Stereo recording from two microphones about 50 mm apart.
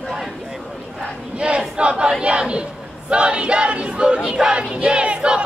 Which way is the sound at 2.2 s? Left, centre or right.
Right.